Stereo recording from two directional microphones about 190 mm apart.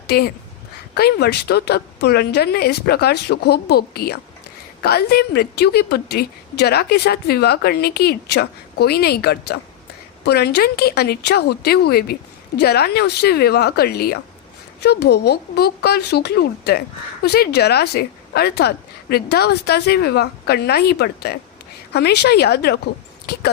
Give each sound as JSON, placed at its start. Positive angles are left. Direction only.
{"t": 0.1, "sound": "a woman's voice", "side_deg": 55}